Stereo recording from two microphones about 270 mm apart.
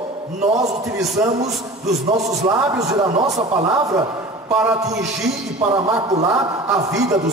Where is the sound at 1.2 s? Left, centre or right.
Centre.